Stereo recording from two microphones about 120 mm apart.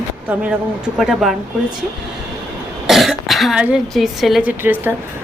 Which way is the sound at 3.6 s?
10° right (ahead or behind).